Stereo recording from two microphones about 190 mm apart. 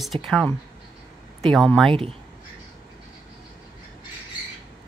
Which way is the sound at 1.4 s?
Centre (ahead or behind).